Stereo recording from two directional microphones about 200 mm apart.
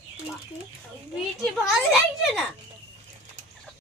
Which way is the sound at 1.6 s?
Centre (ahead or behind).